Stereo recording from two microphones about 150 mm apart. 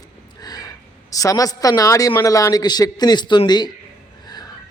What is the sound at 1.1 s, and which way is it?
A man's voice, 25° left (ahead or behind).